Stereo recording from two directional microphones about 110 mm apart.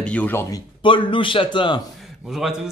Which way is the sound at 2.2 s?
5° right (ahead or behind).